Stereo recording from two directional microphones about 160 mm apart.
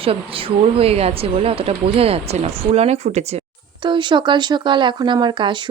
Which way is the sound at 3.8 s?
30° right (ahead or behind).